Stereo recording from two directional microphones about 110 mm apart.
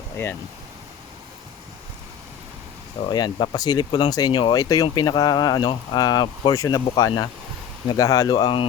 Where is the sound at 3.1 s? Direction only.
40° left (ahead or behind).